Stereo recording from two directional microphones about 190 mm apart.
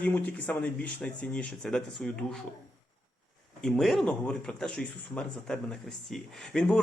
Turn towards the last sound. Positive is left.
turn(degrees=5)  # may be behind; listen again after turning